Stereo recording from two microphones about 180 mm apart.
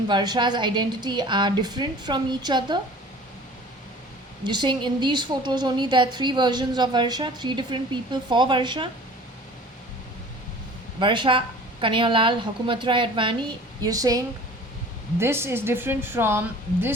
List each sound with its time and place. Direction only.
0.1 s a woman's voice: 25° right (ahead or behind)
4.4 s a woman's voice: 25° right (ahead or behind)
11.0 s a woman's voice: 25° right (ahead or behind)
15.2 s speech: 15° right (ahead or behind)